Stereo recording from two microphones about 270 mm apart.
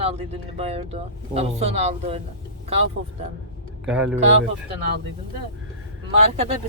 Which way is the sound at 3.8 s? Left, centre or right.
Centre.